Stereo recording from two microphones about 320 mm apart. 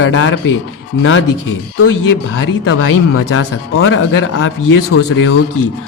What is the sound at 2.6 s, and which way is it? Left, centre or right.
Speech, left.